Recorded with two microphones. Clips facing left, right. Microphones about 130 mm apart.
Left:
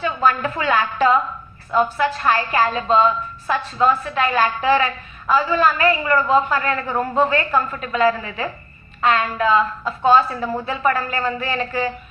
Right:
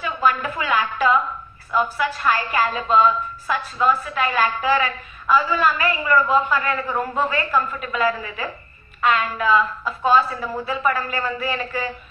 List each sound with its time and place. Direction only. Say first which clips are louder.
0.0 s a woman's voice: left 2 dB; 30° left (ahead or behind)